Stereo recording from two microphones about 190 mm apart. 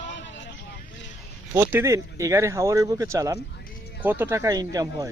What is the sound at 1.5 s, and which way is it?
Speech, 15° right (ahead or behind).